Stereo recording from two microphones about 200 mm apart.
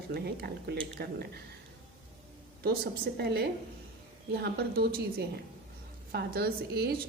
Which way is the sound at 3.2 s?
55° right (ahead or behind).